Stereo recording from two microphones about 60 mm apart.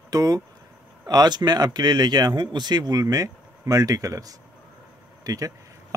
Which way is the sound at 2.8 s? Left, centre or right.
Right.